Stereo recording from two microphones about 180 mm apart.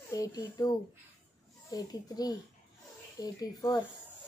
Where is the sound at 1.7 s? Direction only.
20° left (ahead or behind).